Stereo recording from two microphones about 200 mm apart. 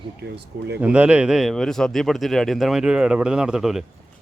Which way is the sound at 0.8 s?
5° right (ahead or behind).